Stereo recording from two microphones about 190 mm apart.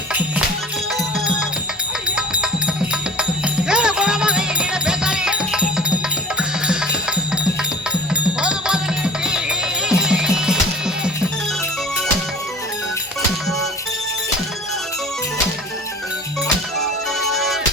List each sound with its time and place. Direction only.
0.1 s music: 5° right (ahead or behind)
2.0 s music: 5° right (ahead or behind)
8.1 s music: 5° right (ahead or behind)
16.8 s music: centre (ahead or behind)